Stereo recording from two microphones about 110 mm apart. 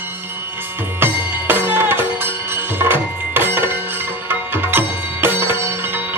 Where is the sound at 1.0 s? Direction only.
20° right (ahead or behind).